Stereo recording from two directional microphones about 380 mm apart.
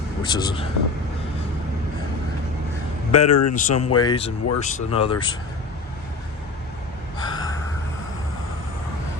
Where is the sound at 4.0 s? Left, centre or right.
Centre.